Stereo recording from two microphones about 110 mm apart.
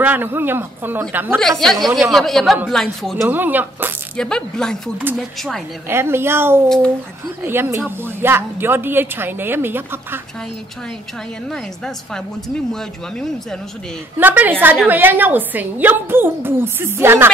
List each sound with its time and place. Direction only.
0.0 s a woman's voice: 15° right (ahead or behind)
1.6 s a woman's voice: 5° left (ahead or behind)
3.3 s a woman's voice: 15° right (ahead or behind)
4.2 s a woman's voice: 5° left (ahead or behind)
5.9 s a woman's voice: 20° right (ahead or behind)
11.5 s a woman's voice: 5° left (ahead or behind)
14.1 s a woman's voice: 15° right (ahead or behind)